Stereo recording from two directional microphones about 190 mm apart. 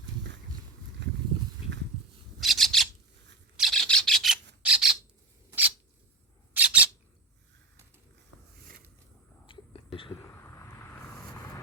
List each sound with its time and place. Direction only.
2.4 s rub: centre (ahead or behind)
3.6 s bird: centre (ahead or behind)
4.6 s a sound: 5° right (ahead or behind)
6.5 s squeak: 10° right (ahead or behind)
9.5 s a sound: 25° left (ahead or behind)
10.2 s vehicle: 15° left (ahead or behind)